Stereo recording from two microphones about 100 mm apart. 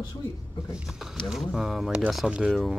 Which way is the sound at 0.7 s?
5° right (ahead or behind).